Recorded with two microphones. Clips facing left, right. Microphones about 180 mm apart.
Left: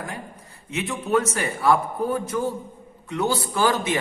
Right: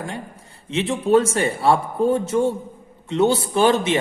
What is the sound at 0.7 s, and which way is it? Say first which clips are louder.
Speech: right 6 dB; 30° right (ahead or behind).